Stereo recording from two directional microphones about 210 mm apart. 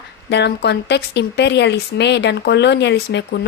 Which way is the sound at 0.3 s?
55° left (ahead or behind).